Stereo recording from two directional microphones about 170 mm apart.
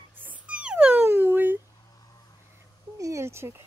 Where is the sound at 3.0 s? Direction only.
15° right (ahead or behind).